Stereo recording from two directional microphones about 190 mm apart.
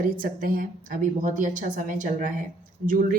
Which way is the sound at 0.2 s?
45° right (ahead or behind).